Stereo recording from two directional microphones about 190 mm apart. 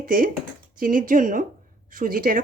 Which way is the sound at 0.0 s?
45° right (ahead or behind).